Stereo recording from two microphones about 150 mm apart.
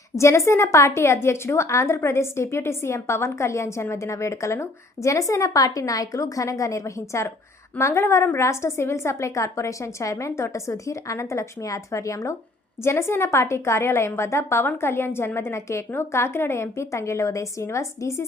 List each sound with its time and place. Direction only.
0.2 s a woman's voice: 20° left (ahead or behind)